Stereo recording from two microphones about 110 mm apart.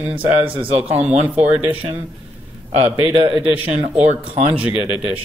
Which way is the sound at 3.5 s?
60° right (ahead or behind).